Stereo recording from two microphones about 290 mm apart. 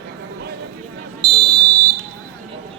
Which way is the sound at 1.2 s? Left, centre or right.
Centre.